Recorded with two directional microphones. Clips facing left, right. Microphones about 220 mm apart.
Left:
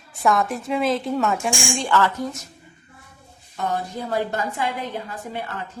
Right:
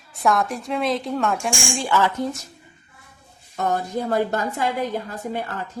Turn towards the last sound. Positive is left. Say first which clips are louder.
# right 3 dB
turn(degrees=-40)  # may be behind; listen again after turning